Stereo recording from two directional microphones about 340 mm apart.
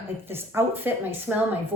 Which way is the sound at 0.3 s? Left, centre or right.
Centre.